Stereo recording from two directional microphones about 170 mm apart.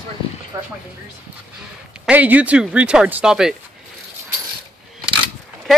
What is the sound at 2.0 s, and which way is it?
Speech, 10° right (ahead or behind).